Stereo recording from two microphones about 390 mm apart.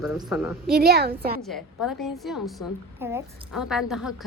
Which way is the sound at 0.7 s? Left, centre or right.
Right.